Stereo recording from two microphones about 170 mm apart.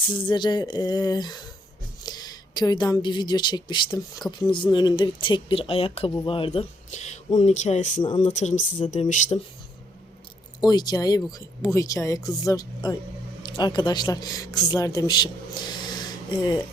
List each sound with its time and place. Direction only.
0.1 s a woman's voice: 30° left (ahead or behind); by 8.0 s 45° left (ahead or behind)
8.0 s a woman's voice: 30° left (ahead or behind)
8.3 s speech: 45° left (ahead or behind)
10.6 s a woman's voice: 25° left (ahead or behind)